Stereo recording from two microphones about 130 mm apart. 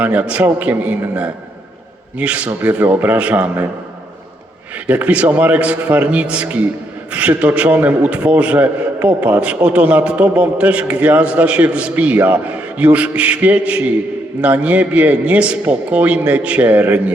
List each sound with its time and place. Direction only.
0.0 s a man's voice: 10° right (ahead or behind)
4.9 s a man's voice: 10° right (ahead or behind)